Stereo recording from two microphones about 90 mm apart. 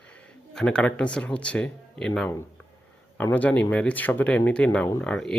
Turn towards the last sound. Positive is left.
turn(degrees=10)  # may be behind; listen again after turning